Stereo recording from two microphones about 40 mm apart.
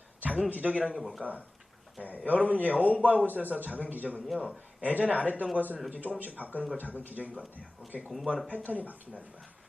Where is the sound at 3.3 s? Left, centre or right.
Right.